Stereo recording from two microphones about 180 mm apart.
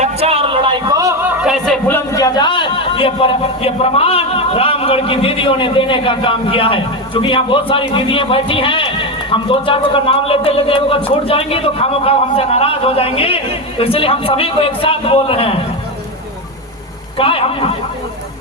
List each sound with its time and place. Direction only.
0.0 s a sound: 35° right (ahead or behind)
1.4 s music: centre (ahead or behind)
2.1 s a man's voice: 20° left (ahead or behind)
17.2 s a man's voice: 30° left (ahead or behind)